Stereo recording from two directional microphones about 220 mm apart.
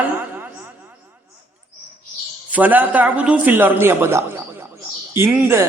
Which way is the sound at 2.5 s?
5° right (ahead or behind).